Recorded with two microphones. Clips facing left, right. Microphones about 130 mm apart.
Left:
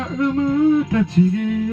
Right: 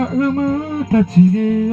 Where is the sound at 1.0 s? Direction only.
40° right (ahead or behind).